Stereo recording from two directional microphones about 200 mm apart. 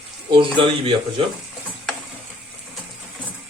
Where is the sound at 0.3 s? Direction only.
25° right (ahead or behind).